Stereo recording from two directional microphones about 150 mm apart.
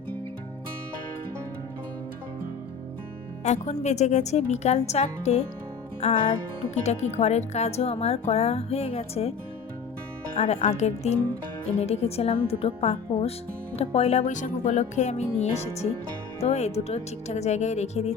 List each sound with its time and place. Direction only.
3.4 s speech: 50° left (ahead or behind)
10.3 s speech: 50° left (ahead or behind)